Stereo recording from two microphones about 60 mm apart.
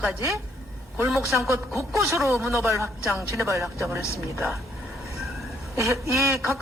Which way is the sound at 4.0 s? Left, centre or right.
Left.